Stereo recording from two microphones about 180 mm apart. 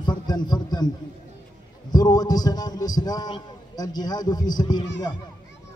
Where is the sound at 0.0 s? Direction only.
25° left (ahead or behind).